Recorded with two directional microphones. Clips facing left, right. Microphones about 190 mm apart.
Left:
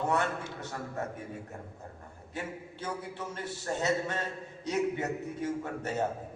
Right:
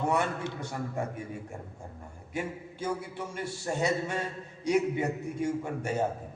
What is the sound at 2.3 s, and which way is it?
A man's voice, 10° right (ahead or behind).